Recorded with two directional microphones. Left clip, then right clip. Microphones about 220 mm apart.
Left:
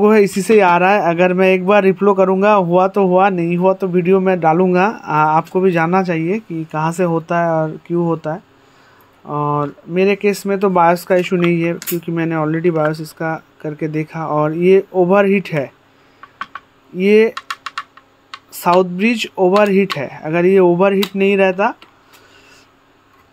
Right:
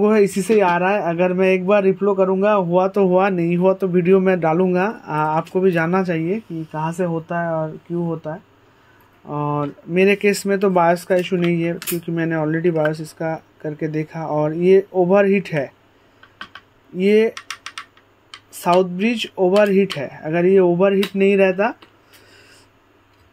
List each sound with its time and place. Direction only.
0.0 s a man's voice: 15° left (ahead or behind)
9.2 s a man's voice: 10° left (ahead or behind)
16.9 s a man's voice: 10° left (ahead or behind)
17.3 s typing: centre (ahead or behind)
18.5 s a man's voice: 15° left (ahead or behind)